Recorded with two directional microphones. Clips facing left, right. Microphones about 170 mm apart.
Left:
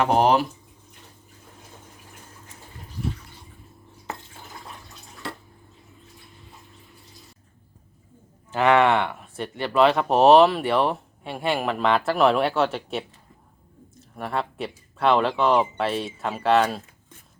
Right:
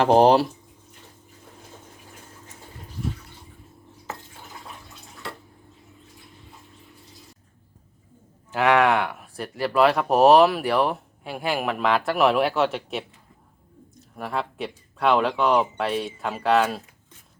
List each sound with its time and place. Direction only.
0.0 s speech: 30° right (ahead or behind)
8.5 s speech: centre (ahead or behind)
14.2 s speech: centre (ahead or behind)